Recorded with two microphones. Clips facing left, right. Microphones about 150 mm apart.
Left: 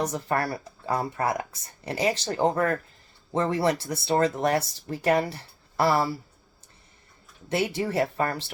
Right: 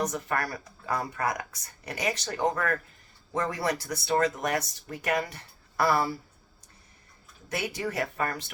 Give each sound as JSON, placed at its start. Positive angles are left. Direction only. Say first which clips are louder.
{"t": 0.0, "sound": "speech", "louder": "left 3 dB", "side_deg": 30}
{"t": 7.5, "sound": "speech", "louder": "left 6 dB", "side_deg": 30}